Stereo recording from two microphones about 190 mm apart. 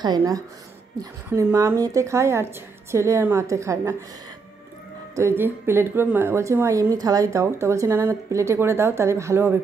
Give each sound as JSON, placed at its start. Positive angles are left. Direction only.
{"t": 0.0, "sound": "a woman's voice", "side_deg": -20}
{"t": 5.1, "sound": "a woman's voice", "side_deg": -15}